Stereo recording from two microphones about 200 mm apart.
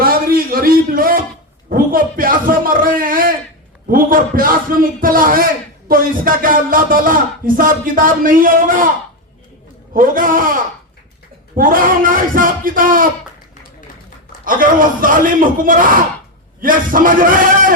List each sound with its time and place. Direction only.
0.0 s a sound: 45° right (ahead or behind)
3.8 s music: 45° right (ahead or behind)
9.9 s music: 45° right (ahead or behind)
14.4 s music: 45° right (ahead or behind)